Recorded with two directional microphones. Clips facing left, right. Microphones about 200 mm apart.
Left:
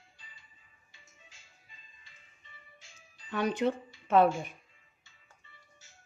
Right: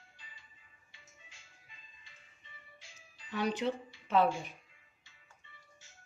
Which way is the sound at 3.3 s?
50° left (ahead or behind).